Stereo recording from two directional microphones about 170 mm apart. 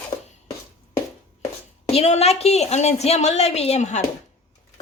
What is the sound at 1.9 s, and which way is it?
A woman's voice, 40° left (ahead or behind).